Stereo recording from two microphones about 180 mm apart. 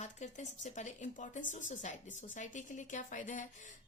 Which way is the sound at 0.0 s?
40° left (ahead or behind).